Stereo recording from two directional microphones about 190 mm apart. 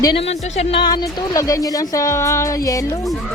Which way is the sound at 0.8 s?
20° left (ahead or behind).